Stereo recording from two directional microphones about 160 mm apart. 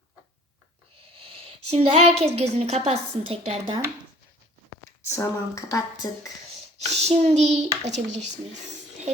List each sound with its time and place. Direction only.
1.1 s a woman's voice: 35° right (ahead or behind)
5.0 s speech: 20° left (ahead or behind)
6.7 s a child's voice: 40° right (ahead or behind)